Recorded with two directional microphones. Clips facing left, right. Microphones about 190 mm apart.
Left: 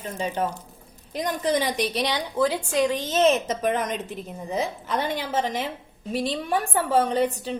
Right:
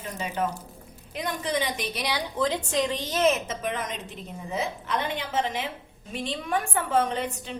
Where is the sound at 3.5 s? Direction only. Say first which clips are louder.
Left 6 dB; 45° left (ahead or behind).